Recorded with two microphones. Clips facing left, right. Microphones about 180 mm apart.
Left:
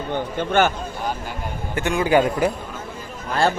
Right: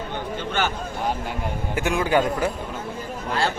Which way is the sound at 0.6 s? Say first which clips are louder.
Left 7 dB; 50° left (ahead or behind).